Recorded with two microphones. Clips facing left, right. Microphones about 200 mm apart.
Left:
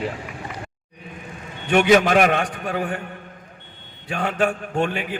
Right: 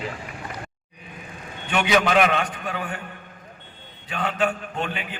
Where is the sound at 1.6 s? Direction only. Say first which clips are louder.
Left 6 dB; 50° left (ahead or behind).